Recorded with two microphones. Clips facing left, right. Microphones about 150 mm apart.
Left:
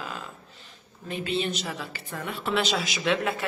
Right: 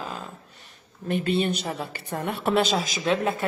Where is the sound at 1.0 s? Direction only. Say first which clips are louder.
Right 5 dB; 50° right (ahead or behind).